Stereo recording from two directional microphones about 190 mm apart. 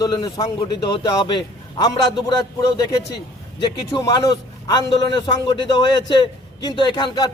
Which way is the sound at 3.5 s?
25° left (ahead or behind).